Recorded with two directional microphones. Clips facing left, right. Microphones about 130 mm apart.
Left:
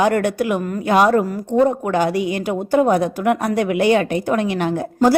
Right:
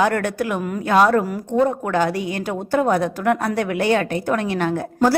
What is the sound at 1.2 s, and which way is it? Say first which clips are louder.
Speech: left 3 dB; centre (ahead or behind).